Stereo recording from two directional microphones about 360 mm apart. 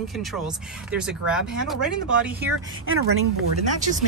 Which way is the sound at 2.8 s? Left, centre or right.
Right.